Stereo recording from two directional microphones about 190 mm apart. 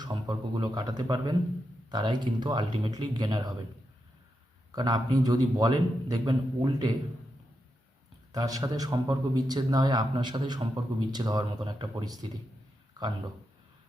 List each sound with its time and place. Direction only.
0.0 s a man's voice: 25° right (ahead or behind)
4.7 s a man's voice: 20° right (ahead or behind)
8.3 s a man's voice: 20° right (ahead or behind)